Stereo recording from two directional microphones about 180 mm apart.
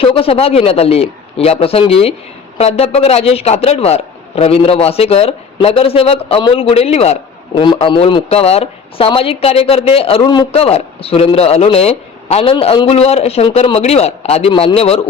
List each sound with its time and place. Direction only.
0.0 s a man's voice: 30° left (ahead or behind)